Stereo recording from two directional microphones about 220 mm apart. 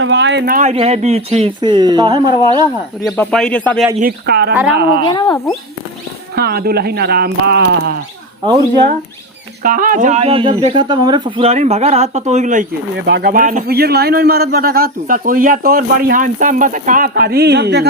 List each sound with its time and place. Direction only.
0.0 s speech: 55° right (ahead or behind); by 2.3 s 20° right (ahead or behind)
3.0 s speech: 5° left (ahead or behind)
4.0 s speech: 45° right (ahead or behind)
5.0 s speech: 20° left (ahead or behind)
6.3 s speech: 45° right (ahead or behind)
9.6 s speech: 40° right (ahead or behind)
13.1 s speech: 45° right (ahead or behind)